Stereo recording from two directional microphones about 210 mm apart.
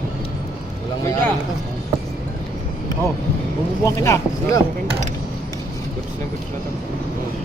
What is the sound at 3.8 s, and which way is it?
Speech, 15° left (ahead or behind).